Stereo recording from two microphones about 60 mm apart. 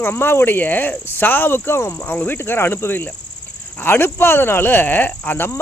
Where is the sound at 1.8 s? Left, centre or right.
Left.